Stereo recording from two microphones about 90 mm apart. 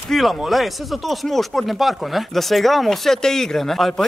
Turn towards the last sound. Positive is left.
turn(degrees=5)  # may be behind; listen again after turning